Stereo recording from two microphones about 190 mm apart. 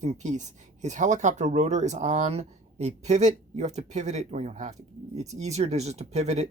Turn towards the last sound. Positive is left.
turn(degrees=-35)  # may be behind; listen again after turning